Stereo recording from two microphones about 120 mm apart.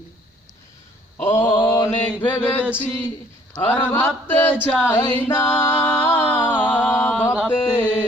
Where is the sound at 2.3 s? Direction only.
15° left (ahead or behind).